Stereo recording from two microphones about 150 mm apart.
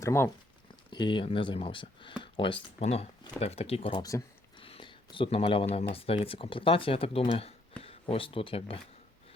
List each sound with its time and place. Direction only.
0.0 s speech: 20° left (ahead or behind)
0.9 s speech: 30° left (ahead or behind)
2.7 s speech: 45° left (ahead or behind)